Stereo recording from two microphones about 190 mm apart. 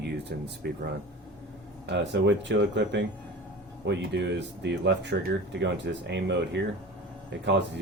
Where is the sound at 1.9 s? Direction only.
65° right (ahead or behind).